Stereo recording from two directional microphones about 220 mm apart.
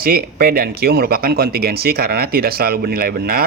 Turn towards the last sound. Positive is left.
turn(degrees=-45)  # may be behind; listen again after turning